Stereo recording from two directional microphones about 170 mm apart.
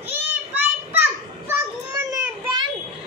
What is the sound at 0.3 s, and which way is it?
Children playing, 10° right (ahead or behind).